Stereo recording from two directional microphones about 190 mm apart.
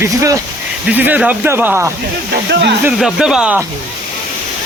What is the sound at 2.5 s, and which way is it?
Speech, 65° right (ahead or behind).